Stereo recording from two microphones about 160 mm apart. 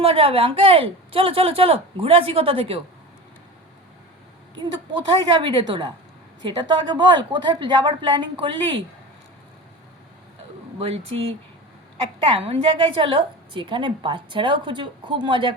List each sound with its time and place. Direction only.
0.0 s speech: 35° right (ahead or behind)
4.5 s a woman's voice: 30° right (ahead or behind)
10.8 s speech: 35° right (ahead or behind)